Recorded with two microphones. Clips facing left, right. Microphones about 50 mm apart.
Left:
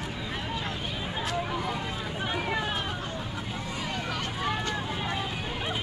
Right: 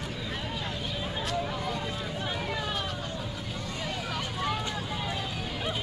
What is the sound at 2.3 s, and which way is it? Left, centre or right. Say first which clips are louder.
Vehicle: left 6 dB; left.